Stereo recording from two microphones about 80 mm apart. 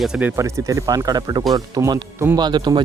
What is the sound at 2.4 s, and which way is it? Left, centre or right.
Speech, right.